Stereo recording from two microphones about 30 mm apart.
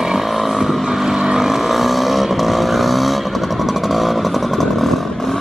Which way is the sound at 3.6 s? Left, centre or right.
Centre.